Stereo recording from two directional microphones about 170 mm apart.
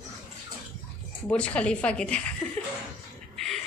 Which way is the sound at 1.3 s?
5° left (ahead or behind).